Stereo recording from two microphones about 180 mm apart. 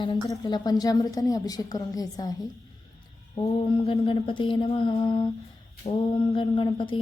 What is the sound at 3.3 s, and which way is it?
A woman's voice, 30° left (ahead or behind).